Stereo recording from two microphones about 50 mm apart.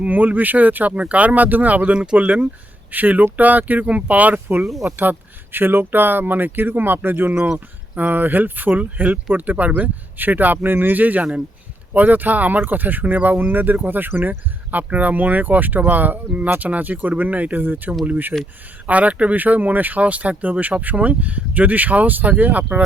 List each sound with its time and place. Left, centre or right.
0.0 s speech: right
1.9 s speech: centre; by 7.3 s right
7.3 s speech: centre
7.9 s speech: right